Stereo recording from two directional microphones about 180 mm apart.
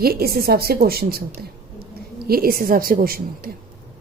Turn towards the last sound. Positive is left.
turn(degrees=-55)  # may be behind; listen again after turning